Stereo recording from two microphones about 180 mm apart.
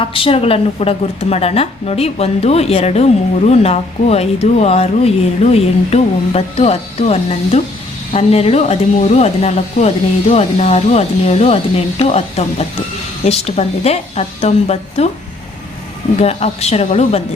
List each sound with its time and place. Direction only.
0.0 s speech: 30° left (ahead or behind)
16.1 s speech: 35° left (ahead or behind)